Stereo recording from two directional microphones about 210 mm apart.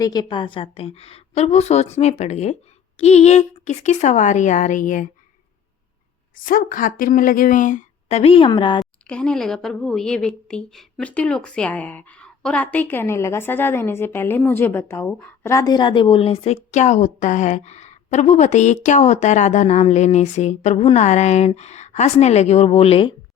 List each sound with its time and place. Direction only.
0.0 s a woman's voice: 20° left (ahead or behind); by 5.0 s 40° left (ahead or behind)
6.3 s speech: 40° left (ahead or behind); by 8.8 s 20° left (ahead or behind)
8.8 s a woman's voice: 5° left (ahead or behind); by 23.1 s 25° left (ahead or behind)